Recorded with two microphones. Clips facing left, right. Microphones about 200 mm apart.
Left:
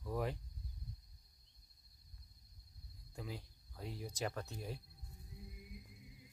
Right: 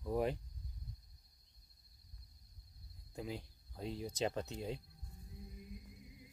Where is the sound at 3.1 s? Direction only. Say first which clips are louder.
Right 4 dB; 20° right (ahead or behind).